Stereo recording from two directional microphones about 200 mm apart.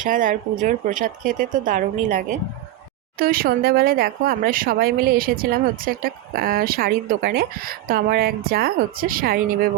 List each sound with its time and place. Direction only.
0.0 s speech: 40° right (ahead or behind)